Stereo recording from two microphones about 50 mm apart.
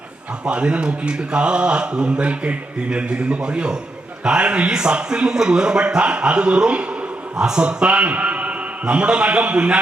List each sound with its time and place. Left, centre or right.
0.4 s a man's voice: centre